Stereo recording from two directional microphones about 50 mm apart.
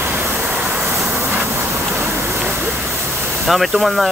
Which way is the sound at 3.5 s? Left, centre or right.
Centre.